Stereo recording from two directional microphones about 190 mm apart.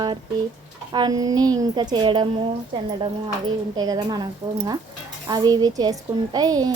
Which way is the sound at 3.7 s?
20° right (ahead or behind).